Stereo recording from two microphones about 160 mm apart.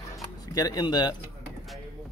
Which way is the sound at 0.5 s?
25° left (ahead or behind).